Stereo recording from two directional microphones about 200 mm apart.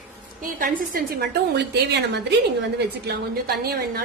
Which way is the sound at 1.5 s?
60° right (ahead or behind).